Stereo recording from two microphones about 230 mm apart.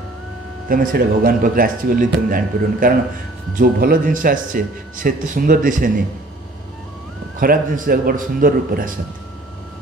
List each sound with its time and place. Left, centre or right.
0.7 s speech: right
7.3 s speech: right